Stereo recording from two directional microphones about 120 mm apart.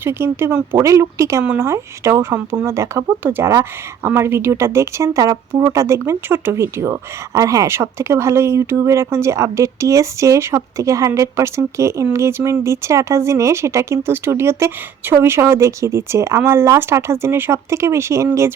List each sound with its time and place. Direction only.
0.0 s speech: 20° right (ahead or behind)